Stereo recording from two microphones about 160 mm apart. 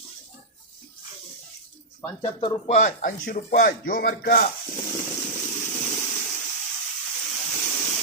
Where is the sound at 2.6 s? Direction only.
50° left (ahead or behind); by 4.4 s 65° left (ahead or behind).